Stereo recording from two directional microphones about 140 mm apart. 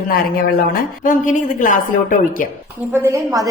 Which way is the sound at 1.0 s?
70° left (ahead or behind).